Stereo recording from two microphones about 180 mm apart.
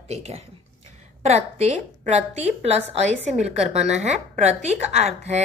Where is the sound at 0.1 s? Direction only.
35° right (ahead or behind).